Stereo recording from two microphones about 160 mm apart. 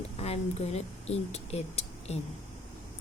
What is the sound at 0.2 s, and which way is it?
A woman's voice, 40° left (ahead or behind).